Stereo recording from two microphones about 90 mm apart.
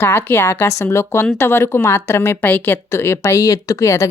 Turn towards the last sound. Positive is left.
turn(degrees=35)  # may be behind; listen again after turning